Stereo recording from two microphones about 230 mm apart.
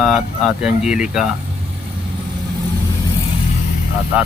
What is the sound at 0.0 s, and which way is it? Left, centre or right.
Speech, centre.